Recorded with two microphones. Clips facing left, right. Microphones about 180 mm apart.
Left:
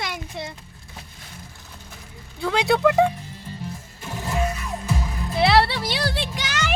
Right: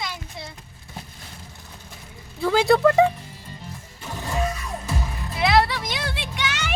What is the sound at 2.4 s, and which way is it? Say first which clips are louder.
Speech: right 2 dB; centre (ahead or behind).